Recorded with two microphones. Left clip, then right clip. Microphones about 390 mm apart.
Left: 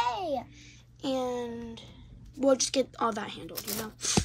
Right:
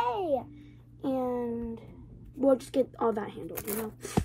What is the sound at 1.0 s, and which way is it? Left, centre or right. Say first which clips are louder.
A woman's voice: even; left.